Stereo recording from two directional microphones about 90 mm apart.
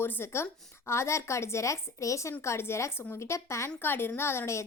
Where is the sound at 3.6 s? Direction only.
20° left (ahead or behind).